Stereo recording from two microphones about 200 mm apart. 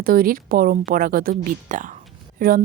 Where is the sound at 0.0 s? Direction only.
45° right (ahead or behind).